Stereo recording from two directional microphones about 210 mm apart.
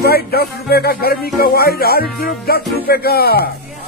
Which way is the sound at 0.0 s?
50° left (ahead or behind).